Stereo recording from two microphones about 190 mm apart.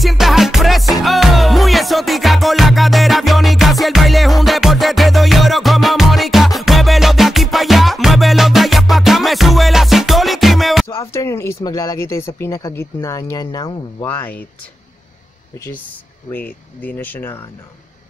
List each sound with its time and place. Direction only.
0.0 s music: centre (ahead or behind)
10.9 s speech: 15° left (ahead or behind)
14.0 s speech: 10° left (ahead or behind)
16.3 s speech: 10° left (ahead or behind)